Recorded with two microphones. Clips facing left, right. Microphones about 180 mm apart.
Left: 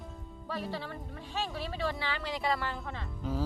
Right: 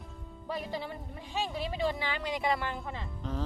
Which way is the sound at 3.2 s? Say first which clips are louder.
Left 3 dB; 5° left (ahead or behind).